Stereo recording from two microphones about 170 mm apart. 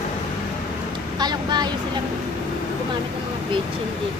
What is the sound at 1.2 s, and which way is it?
Speech, 25° right (ahead or behind).